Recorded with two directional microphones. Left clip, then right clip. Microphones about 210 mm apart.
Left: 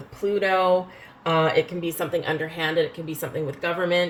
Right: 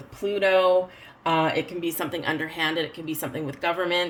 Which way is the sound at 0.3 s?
45° right (ahead or behind).